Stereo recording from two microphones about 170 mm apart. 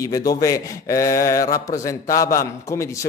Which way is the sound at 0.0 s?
20° left (ahead or behind).